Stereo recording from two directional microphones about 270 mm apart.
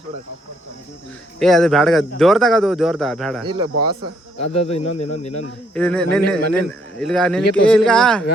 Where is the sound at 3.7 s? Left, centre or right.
Right.